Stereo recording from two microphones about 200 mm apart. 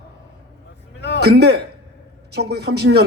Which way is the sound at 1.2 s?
55° right (ahead or behind).